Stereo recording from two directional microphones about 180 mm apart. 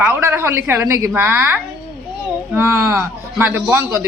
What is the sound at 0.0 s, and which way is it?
A woman's voice, 15° right (ahead or behind).